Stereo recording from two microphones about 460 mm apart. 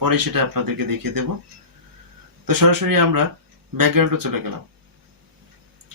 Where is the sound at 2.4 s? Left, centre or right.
Right.